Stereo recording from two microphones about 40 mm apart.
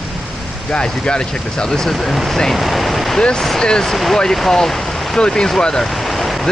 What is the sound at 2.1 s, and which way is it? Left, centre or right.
Speech, centre.